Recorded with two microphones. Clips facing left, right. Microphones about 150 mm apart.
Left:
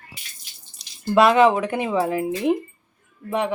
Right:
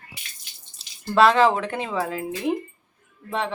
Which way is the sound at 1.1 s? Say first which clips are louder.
Left 2 dB; 10° left (ahead or behind).